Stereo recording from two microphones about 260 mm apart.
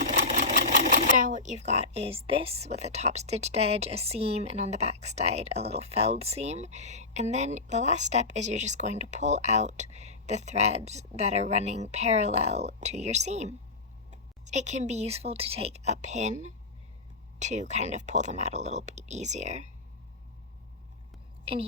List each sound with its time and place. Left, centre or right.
0.6 s sewing machine: right
1.1 s a woman's voice: right
17.4 s a woman's voice: right